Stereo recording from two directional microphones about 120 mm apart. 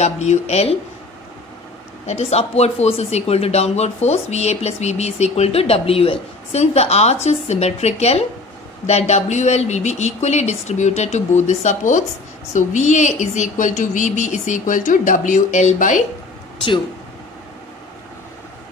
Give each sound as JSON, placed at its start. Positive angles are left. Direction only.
{"t": 0.0, "sound": "speech", "side_deg": 65}
{"t": 2.0, "sound": "a woman's voice", "side_deg": 65}